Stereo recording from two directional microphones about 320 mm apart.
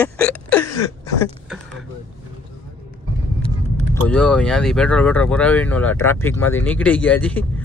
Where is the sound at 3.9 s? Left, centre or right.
Centre.